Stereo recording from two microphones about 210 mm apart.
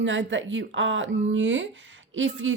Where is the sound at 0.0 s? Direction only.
60° right (ahead or behind).